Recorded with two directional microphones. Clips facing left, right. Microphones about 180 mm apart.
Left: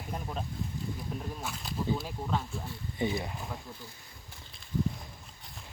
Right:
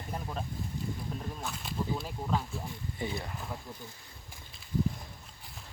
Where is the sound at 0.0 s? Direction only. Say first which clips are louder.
Even; 5° left (ahead or behind).